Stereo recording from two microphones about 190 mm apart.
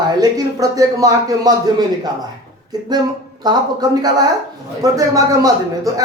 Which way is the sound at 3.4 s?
20° right (ahead or behind).